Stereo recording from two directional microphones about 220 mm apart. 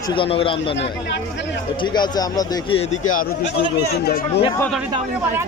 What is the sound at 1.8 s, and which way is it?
A man's voice, 20° left (ahead or behind).